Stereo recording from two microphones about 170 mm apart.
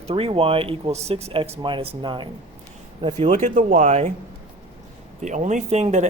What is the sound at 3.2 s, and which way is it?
Speech, 45° right (ahead or behind).